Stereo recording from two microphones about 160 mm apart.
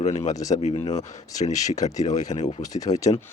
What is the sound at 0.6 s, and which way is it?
Speech, 40° left (ahead or behind).